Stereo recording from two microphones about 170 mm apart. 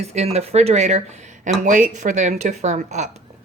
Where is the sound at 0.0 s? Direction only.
40° right (ahead or behind).